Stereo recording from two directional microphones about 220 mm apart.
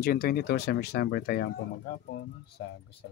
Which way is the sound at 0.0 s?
45° left (ahead or behind).